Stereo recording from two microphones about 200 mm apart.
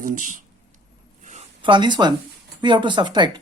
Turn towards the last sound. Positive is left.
turn(degrees=-20)  # may be behind; listen again after turning